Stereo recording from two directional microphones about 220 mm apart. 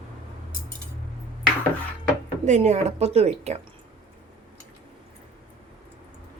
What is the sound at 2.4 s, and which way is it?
A woman's voice, 30° right (ahead or behind).